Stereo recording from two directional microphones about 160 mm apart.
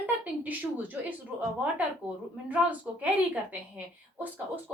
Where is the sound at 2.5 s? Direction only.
10° right (ahead or behind).